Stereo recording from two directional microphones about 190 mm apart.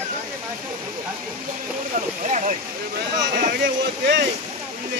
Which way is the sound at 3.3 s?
55° right (ahead or behind).